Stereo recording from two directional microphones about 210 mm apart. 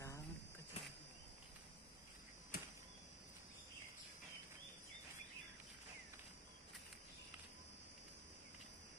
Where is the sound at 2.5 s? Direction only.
45° left (ahead or behind).